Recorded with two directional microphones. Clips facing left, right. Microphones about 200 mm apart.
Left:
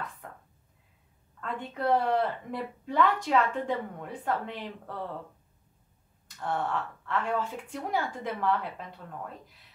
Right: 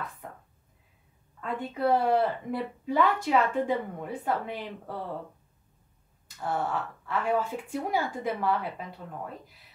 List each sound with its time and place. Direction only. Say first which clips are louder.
1.4 s speech: right 3 dB; 5° right (ahead or behind)
6.4 s speech: right 1 dB; 5° right (ahead or behind)